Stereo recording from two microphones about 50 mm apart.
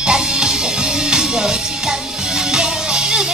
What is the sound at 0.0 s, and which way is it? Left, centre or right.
Music, centre.